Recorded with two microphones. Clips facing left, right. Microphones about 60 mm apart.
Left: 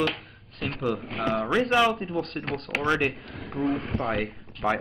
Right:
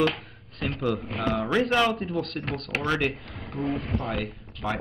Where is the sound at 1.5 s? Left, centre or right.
Centre.